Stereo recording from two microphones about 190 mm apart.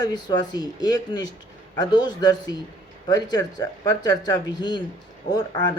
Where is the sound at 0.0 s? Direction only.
20° left (ahead or behind).